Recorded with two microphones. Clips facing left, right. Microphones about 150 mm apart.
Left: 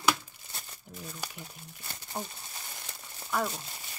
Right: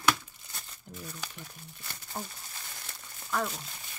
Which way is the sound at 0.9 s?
Centre (ahead or behind).